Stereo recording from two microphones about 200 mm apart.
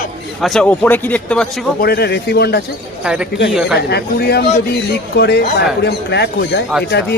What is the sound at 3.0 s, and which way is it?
Speech, 5° right (ahead or behind).